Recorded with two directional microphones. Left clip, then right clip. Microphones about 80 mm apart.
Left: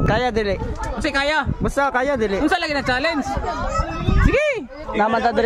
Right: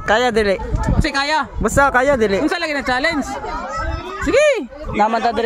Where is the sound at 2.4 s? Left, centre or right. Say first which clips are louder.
Even; centre.